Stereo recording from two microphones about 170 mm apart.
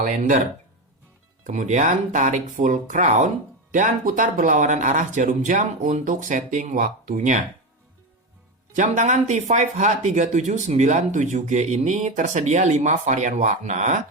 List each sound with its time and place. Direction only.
0.0 s speech: 50° right (ahead or behind)
1.5 s speech: 45° right (ahead or behind)
8.7 s speech: 45° right (ahead or behind)